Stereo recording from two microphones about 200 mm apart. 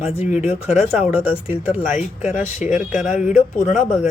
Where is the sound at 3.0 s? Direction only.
40° left (ahead or behind).